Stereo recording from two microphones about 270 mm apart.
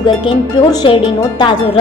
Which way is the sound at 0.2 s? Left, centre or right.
Centre.